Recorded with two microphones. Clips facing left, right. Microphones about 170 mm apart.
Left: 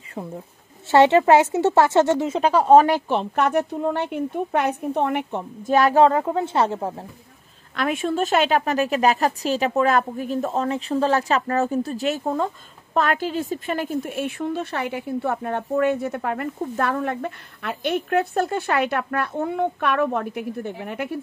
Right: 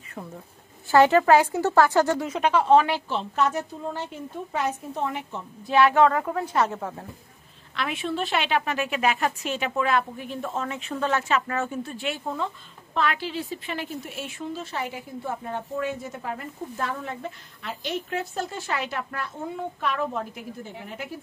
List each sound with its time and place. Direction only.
0.9 s a woman's voice: 25° left (ahead or behind); by 5.4 s 65° left (ahead or behind)
5.6 s a woman's voice: 45° left (ahead or behind)
7.7 s a woman's voice: 45° left (ahead or behind); by 21.1 s 65° left (ahead or behind)